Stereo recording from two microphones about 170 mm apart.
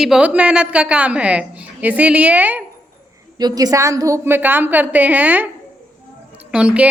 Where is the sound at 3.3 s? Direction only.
25° right (ahead or behind).